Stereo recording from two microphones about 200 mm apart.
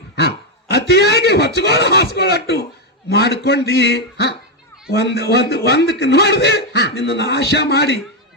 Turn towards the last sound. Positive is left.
turn(degrees=55)  # may be behind; listen again after turning